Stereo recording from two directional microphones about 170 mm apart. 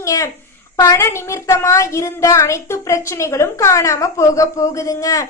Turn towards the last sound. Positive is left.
turn(degrees=20)  # may be behind; listen again after turning